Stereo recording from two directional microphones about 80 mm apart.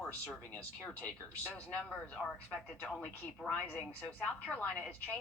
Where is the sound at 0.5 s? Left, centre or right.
Centre.